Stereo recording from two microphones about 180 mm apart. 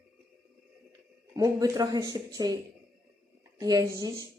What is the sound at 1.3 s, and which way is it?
Speech, 20° right (ahead or behind).